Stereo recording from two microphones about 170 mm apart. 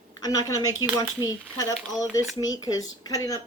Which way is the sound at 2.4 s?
20° left (ahead or behind).